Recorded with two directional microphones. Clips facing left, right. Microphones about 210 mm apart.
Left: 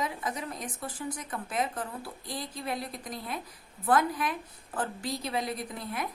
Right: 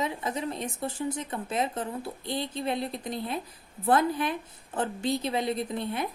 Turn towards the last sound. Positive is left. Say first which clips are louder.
# right 5 dB
turn(degrees=-25)  # may be behind; listen again after turning